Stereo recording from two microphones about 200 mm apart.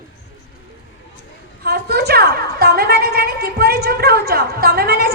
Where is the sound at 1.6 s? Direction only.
50° right (ahead or behind).